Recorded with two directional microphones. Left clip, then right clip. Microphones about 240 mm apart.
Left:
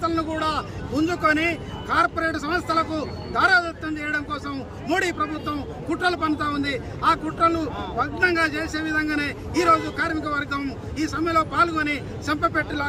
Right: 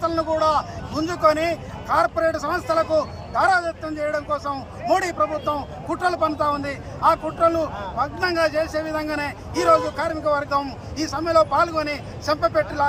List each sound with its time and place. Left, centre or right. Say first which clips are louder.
0.0 s a man's voice: right 4 dB; centre